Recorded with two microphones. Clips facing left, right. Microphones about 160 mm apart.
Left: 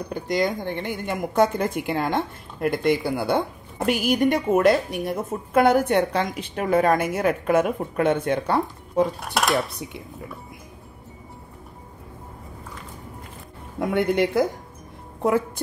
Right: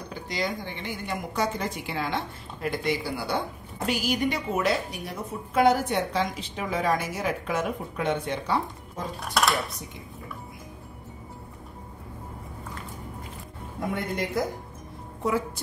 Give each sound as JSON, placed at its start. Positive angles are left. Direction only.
{"t": 0.1, "sound": "a woman's voice", "side_deg": 50}
{"t": 13.7, "sound": "speech", "side_deg": 65}